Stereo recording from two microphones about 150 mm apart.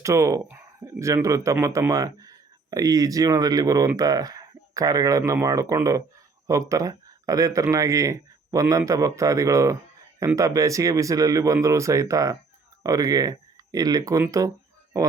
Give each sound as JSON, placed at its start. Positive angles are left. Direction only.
{"t": 0.0, "sound": "speech", "side_deg": -20}